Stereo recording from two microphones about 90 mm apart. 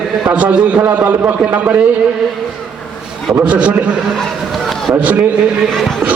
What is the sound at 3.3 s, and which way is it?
Speech, 15° right (ahead or behind).